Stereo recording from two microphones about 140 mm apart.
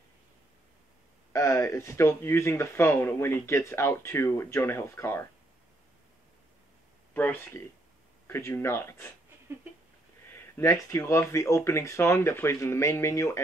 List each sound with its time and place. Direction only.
1.3 s speech: 20° left (ahead or behind)
7.2 s speech: 15° left (ahead or behind)
10.3 s speech: 15° left (ahead or behind)